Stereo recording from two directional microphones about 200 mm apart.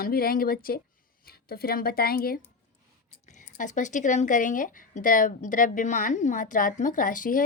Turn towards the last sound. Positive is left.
turn(degrees=40)  # may be behind; listen again after turning